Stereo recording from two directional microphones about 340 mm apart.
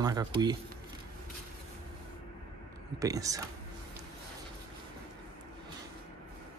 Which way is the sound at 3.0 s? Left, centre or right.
Centre.